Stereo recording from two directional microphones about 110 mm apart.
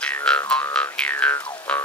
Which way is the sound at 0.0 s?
10° left (ahead or behind).